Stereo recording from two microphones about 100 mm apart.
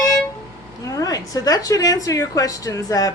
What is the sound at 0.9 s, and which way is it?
A woman's voice, 35° left (ahead or behind).